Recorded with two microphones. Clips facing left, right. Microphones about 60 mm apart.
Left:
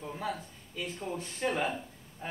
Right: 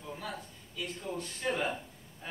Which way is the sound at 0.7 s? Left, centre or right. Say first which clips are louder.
Left 1 dB; left.